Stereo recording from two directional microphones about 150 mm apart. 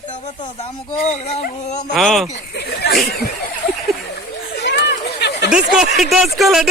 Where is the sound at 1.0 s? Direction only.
50° left (ahead or behind).